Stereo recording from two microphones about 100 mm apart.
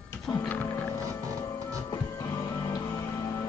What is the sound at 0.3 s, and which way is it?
Music, 10° left (ahead or behind).